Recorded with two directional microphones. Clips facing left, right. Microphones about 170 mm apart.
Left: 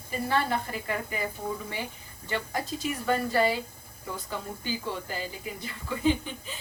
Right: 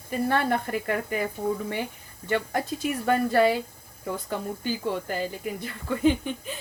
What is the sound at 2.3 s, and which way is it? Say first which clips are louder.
Speech: right 5 dB; 55° right (ahead or behind).